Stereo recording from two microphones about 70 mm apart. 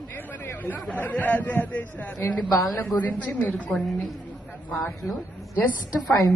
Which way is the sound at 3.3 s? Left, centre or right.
Left.